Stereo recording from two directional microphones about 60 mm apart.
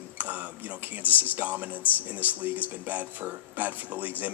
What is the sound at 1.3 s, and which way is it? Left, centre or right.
Speech, right.